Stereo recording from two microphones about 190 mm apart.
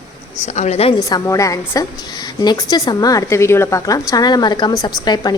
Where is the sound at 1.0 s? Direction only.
15° left (ahead or behind).